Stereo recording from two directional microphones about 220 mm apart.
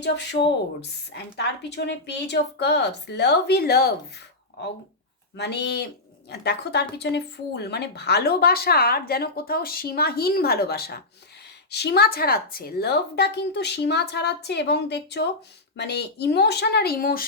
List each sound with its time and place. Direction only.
0.0 s a woman's voice: 50° left (ahead or behind)
5.4 s a woman's voice: 50° left (ahead or behind)